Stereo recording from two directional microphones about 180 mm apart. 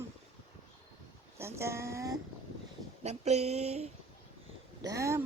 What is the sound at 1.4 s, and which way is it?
Speech, 15° right (ahead or behind).